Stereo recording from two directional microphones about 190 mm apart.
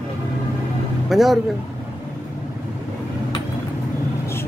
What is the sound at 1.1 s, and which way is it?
Speech, centre (ahead or behind).